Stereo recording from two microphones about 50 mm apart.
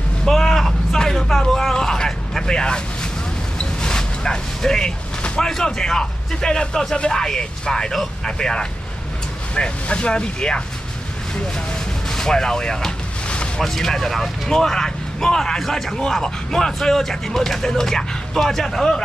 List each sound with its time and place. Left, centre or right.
0.2 s vehicle: centre
3.5 s speech: centre
12.1 s a sound: centre
13.6 s speech: centre